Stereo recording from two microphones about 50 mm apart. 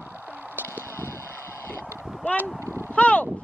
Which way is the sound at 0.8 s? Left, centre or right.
Left.